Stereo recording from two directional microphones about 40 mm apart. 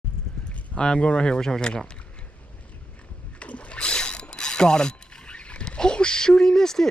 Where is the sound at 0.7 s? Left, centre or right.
Left.